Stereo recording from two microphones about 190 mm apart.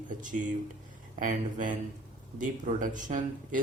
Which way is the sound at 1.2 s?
45° right (ahead or behind).